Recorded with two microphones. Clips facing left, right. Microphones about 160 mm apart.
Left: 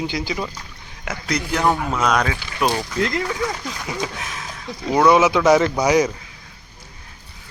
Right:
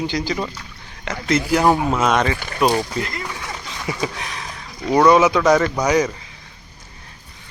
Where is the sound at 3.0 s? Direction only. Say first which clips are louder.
Left 6 dB; 90° left.